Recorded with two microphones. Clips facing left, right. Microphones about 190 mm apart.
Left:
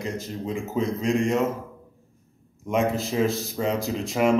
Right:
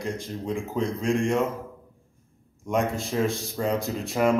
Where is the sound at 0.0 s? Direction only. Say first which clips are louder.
Left 1 dB; centre (ahead or behind).